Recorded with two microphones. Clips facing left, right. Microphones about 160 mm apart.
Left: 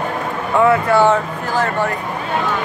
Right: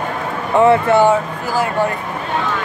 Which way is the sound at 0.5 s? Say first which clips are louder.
Right 2 dB; 20° right (ahead or behind).